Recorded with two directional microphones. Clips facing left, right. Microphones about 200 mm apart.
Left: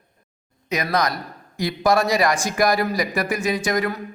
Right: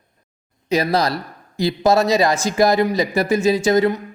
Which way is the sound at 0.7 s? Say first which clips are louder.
Right 4 dB; 30° right (ahead or behind).